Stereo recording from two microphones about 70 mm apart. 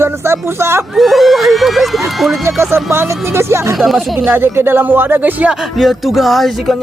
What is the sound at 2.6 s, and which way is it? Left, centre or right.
Speech, right.